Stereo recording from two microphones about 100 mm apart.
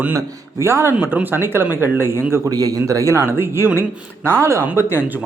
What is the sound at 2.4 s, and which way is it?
Speech, 40° right (ahead or behind).